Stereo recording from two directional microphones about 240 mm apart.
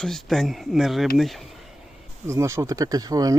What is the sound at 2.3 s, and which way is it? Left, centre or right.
Speech, centre.